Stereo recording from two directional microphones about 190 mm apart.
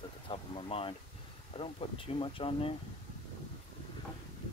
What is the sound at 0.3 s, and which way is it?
Speech, 30° left (ahead or behind).